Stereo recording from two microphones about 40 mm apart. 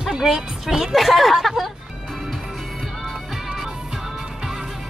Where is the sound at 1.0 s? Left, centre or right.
Centre.